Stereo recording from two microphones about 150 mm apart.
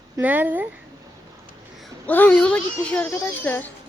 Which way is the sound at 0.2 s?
10° right (ahead or behind).